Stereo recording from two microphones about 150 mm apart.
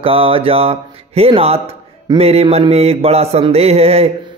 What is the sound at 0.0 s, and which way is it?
A man's voice, 40° right (ahead or behind).